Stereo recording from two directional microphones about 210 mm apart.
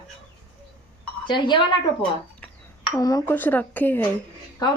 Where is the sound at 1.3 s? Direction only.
20° left (ahead or behind).